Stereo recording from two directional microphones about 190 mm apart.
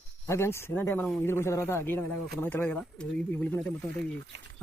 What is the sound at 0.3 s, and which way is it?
A man's voice, 15° left (ahead or behind).